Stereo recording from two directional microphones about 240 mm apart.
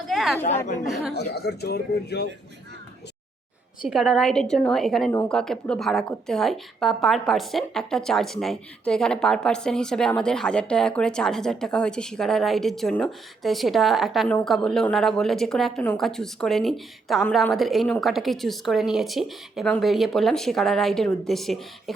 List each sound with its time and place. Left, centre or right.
0.1 s a woman's voice: centre
0.4 s speech: left
0.9 s a woman's voice: centre
1.1 s speech: left
3.8 s a woman's voice: centre